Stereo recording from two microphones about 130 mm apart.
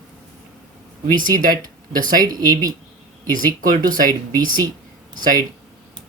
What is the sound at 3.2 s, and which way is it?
Speech, 90° right.